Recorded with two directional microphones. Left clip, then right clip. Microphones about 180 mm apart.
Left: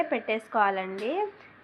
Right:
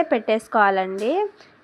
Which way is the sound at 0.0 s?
40° right (ahead or behind).